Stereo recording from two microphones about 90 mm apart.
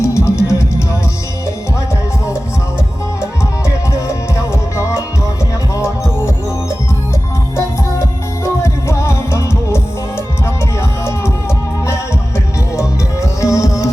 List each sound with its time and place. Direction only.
0.0 s music: 30° left (ahead or behind)
8.6 s music: 30° left (ahead or behind)
13.4 s music: 35° left (ahead or behind)